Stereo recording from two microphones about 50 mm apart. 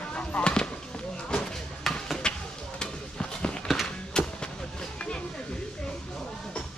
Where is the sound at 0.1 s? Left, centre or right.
Left.